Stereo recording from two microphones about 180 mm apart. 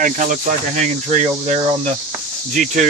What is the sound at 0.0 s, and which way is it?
Speech, 45° right (ahead or behind).